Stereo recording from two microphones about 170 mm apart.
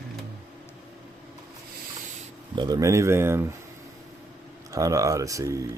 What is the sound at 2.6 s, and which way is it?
Speech, 25° right (ahead or behind).